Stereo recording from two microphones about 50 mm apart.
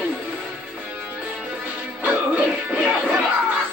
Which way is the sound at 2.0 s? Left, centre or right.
Right.